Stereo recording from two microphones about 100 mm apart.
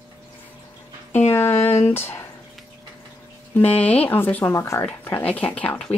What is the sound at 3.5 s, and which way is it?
Speech, 15° left (ahead or behind).